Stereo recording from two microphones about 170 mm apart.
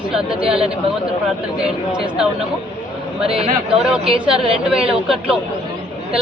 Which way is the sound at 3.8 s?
5° right (ahead or behind).